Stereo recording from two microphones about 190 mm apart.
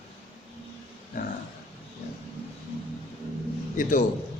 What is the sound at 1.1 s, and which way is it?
Dog, 50° left (ahead or behind).